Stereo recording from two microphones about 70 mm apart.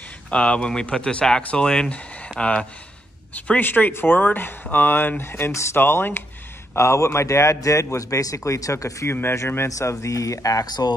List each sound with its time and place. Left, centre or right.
0.3 s a man's voice: centre; by 9.1 s left
9.1 s speech: left
9.7 s a man's voice: left